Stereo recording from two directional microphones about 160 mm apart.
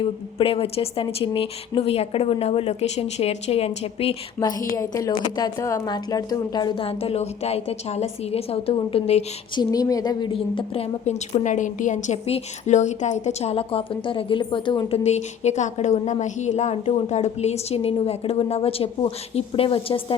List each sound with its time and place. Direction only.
0.0 s a woman's voice: 35° left (ahead or behind)
4.8 s a woman's voice: 20° left (ahead or behind); by 9.2 s 40° left (ahead or behind)
9.6 s a woman's voice: 25° left (ahead or behind)
11.0 s a woman's voice: 50° left (ahead or behind); by 20.1 s 35° left (ahead or behind)